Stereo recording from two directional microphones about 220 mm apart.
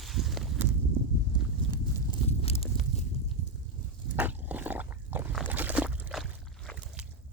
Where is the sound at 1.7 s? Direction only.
25° left (ahead or behind).